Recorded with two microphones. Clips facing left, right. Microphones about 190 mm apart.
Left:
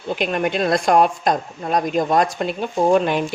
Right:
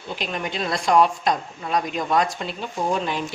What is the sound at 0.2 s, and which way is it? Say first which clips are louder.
Speech: left 7 dB; 55° left (ahead or behind).